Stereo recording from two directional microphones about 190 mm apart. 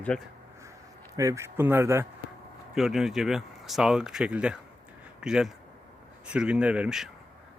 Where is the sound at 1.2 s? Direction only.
15° right (ahead or behind).